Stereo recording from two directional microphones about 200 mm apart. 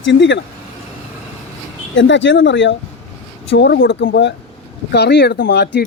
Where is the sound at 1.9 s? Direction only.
70° left (ahead or behind).